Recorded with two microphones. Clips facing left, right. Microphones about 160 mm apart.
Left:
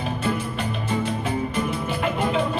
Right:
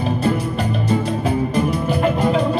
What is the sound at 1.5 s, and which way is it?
Music, 40° right (ahead or behind).